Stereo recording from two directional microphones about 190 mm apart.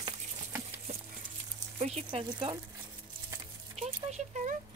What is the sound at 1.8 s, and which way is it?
Speech, 30° right (ahead or behind).